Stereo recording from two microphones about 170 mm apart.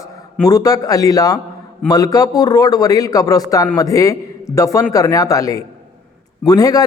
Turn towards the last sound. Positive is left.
turn(degrees=20)  # may be behind; listen again after turning